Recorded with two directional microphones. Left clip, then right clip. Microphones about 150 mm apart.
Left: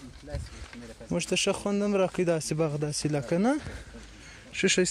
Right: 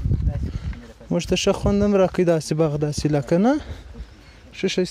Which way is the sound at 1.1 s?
45° right (ahead or behind).